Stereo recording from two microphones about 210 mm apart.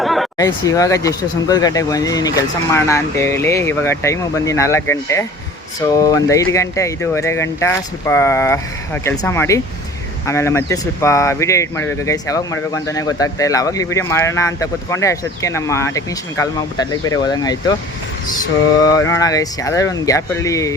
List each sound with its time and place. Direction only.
0.0 s chatter: centre (ahead or behind)
0.3 s speech: 15° left (ahead or behind)
18.8 s speech: 15° left (ahead or behind)